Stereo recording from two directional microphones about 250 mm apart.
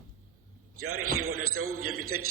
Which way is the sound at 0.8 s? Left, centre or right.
Right.